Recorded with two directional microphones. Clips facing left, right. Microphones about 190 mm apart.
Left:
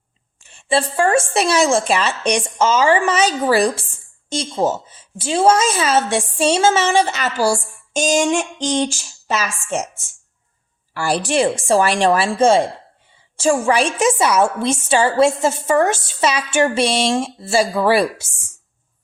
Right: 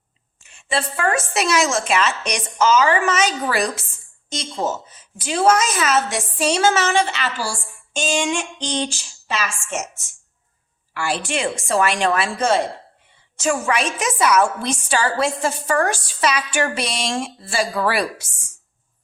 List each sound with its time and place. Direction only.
0.4 s a woman's voice: 30° left (ahead or behind)
10.9 s a woman's voice: 35° left (ahead or behind)